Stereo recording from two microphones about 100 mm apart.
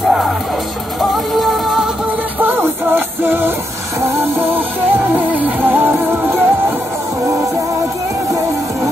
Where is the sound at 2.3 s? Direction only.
20° right (ahead or behind).